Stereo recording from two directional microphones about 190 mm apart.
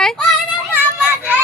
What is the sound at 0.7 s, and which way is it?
Children playing, 5° right (ahead or behind).